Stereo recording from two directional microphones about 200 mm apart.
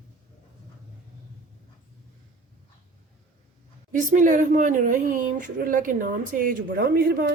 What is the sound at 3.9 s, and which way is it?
A woman's voice, 40° right (ahead or behind).